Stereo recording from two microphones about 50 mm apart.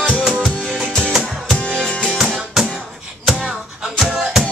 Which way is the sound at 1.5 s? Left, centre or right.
Centre.